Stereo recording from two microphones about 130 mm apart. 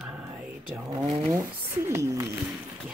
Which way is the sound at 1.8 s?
20° right (ahead or behind).